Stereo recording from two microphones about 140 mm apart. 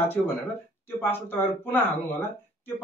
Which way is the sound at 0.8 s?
15° left (ahead or behind).